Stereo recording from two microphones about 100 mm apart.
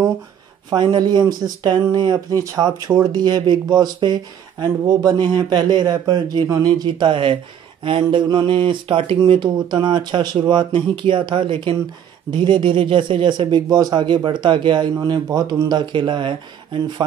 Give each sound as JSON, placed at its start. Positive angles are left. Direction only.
{"t": 0.7, "sound": "speech", "side_deg": -45}
{"t": 9.2, "sound": "speech", "side_deg": -50}